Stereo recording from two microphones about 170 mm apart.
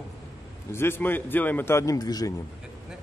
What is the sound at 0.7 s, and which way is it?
A man's voice, 15° left (ahead or behind).